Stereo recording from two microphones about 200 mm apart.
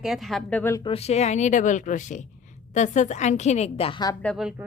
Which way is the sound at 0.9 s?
30° left (ahead or behind).